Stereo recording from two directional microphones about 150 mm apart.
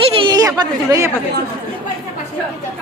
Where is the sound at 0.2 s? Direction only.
25° right (ahead or behind).